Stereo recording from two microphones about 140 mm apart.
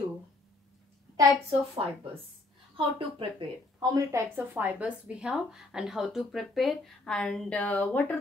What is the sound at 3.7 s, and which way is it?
A woman's voice, 25° right (ahead or behind).